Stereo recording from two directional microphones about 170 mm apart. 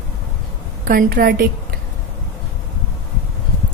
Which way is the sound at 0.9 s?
60° right (ahead or behind).